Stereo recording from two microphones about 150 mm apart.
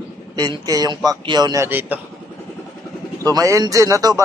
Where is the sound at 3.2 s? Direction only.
20° right (ahead or behind).